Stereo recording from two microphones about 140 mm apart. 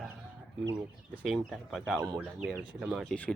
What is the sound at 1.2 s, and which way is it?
Speech, centre (ahead or behind).